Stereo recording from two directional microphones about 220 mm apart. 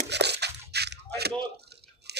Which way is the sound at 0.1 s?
50° right (ahead or behind).